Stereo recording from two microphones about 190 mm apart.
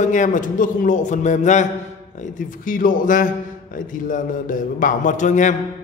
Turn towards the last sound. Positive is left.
turn(degrees=40)  # may be behind; listen again after turning